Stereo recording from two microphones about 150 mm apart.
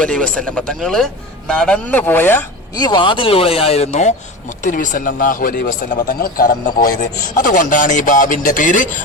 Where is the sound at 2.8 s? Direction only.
30° left (ahead or behind).